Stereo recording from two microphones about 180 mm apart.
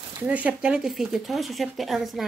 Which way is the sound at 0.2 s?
10° right (ahead or behind).